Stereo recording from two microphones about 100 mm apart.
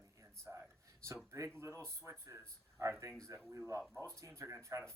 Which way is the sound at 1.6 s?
30° right (ahead or behind).